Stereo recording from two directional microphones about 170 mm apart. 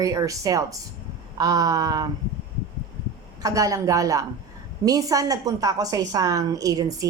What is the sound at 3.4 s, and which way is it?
Speech, 20° right (ahead or behind).